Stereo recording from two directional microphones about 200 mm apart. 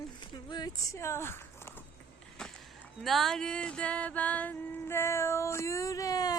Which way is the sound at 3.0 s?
Centre (ahead or behind).